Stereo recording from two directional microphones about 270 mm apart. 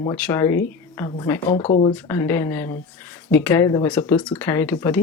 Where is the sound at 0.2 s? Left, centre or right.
Centre.